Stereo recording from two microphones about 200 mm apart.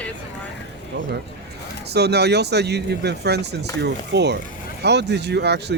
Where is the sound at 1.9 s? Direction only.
55° right (ahead or behind).